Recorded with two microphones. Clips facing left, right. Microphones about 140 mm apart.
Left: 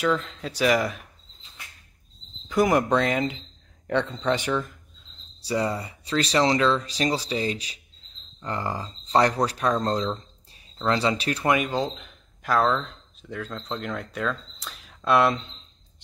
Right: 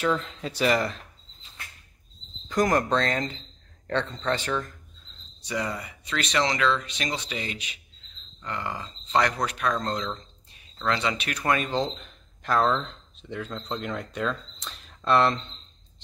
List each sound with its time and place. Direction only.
0.0 s speech: centre (ahead or behind)
2.4 s speech: 10° left (ahead or behind)
5.4 s speech: 30° left (ahead or behind)
11.4 s speech: 10° left (ahead or behind)